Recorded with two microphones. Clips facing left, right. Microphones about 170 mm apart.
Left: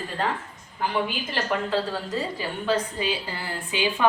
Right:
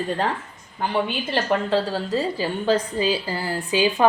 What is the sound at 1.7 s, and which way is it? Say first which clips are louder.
A woman's voice: right 4 dB; 30° right (ahead or behind).